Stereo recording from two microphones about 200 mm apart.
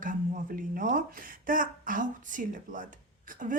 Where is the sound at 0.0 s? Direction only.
45° right (ahead or behind).